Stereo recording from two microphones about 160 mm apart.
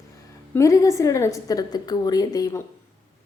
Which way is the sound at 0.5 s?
20° left (ahead or behind).